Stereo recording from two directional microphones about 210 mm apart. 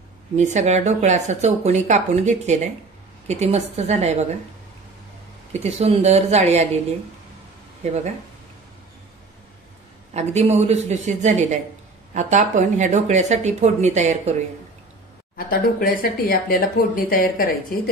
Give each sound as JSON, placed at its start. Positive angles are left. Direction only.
{"t": 0.4, "sound": "speech", "side_deg": -35}
{"t": 5.5, "sound": "speech", "side_deg": -30}
{"t": 7.8, "sound": "speech", "side_deg": -30}
{"t": 10.1, "sound": "speech", "side_deg": -30}
{"t": 15.3, "sound": "speech", "side_deg": 45}